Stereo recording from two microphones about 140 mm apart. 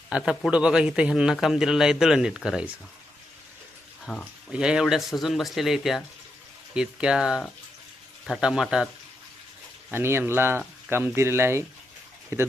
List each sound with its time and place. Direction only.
0.2 s a man's voice: centre (ahead or behind)
4.0 s speech: 5° left (ahead or behind)
4.5 s a man's voice: 5° right (ahead or behind)
9.9 s speech: 15° right (ahead or behind)